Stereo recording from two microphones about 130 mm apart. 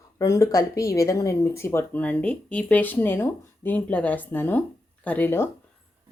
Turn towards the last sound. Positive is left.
turn(degrees=15)  # may be behind; listen again after turning